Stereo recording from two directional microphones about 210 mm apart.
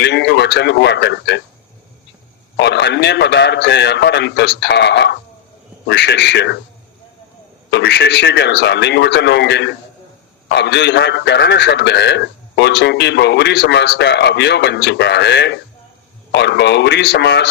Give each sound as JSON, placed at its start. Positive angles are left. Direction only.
{"t": 0.0, "sound": "speech", "side_deg": 55}
{"t": 2.6, "sound": "a man's voice", "side_deg": 55}
{"t": 7.7, "sound": "a man's voice", "side_deg": 55}